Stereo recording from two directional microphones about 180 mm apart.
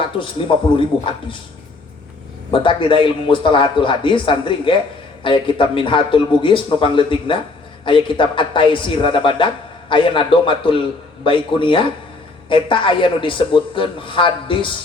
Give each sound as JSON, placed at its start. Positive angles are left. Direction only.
{"t": 0.0, "sound": "a man's voice", "side_deg": 30}
{"t": 2.5, "sound": "a man's voice", "side_deg": 30}